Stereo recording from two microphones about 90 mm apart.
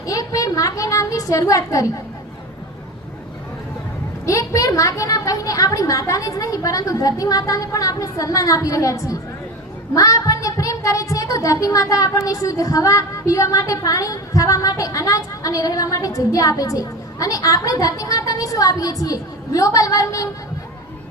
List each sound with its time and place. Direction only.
0.0 s a child's voice: 40° left (ahead or behind)
4.3 s a woman's voice: 40° left (ahead or behind)